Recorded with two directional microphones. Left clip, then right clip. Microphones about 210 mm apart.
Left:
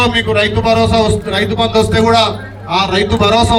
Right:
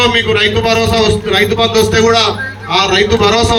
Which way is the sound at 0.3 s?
60° left (ahead or behind).